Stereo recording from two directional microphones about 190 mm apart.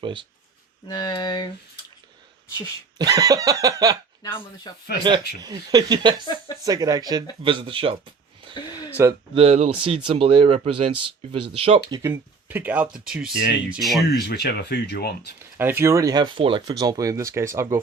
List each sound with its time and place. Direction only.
0.0 s speech: 25° right (ahead or behind)
0.9 s speech: 20° left (ahead or behind)
3.0 s speech: 20° right (ahead or behind)
4.4 s speech: 25° left (ahead or behind)
5.4 s speech: 20° right (ahead or behind)
6.2 s speech: 25° left (ahead or behind)
6.7 s speech: 20° right (ahead or behind)
9.0 s speech: 15° right (ahead or behind)
9.3 s speech: 30° right (ahead or behind)
11.9 s speech: 20° right (ahead or behind)
12.1 s speech: 10° right (ahead or behind)
14.1 s speech: 60° left (ahead or behind)
15.5 s speech: 10° right (ahead or behind)